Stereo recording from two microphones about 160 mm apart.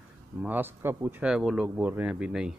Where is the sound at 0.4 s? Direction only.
10° right (ahead or behind).